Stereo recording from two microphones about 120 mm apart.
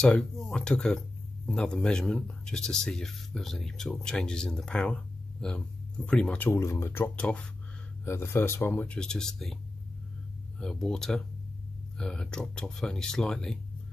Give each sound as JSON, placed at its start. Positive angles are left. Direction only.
{"t": 0.0, "sound": "speech", "side_deg": 5}
{"t": 6.5, "sound": "speech", "side_deg": 25}
{"t": 10.6, "sound": "speech", "side_deg": 5}